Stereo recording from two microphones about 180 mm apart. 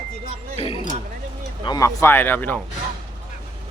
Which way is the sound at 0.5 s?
35° left (ahead or behind).